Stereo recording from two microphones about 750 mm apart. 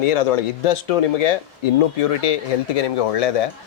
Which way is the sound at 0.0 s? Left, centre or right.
Left.